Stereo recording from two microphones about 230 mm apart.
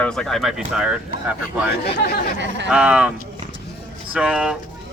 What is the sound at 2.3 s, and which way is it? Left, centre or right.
Speech, right.